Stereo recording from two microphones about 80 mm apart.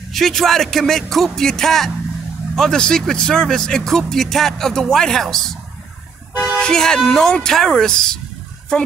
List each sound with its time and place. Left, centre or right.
0.1 s speech: centre
6.3 s toot: centre
6.6 s speech: centre